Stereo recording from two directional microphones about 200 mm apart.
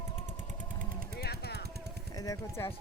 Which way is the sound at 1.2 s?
55° left (ahead or behind).